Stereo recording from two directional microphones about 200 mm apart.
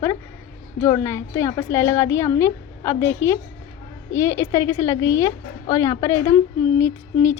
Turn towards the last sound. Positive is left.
turn(degrees=10)  # may be behind; listen again after turning